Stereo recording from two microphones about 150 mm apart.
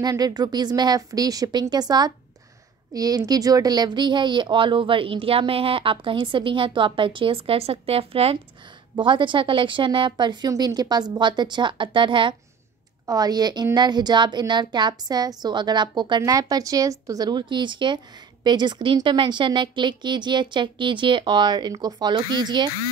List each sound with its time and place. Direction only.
0.0 s a woman's voice: 25° right (ahead or behind)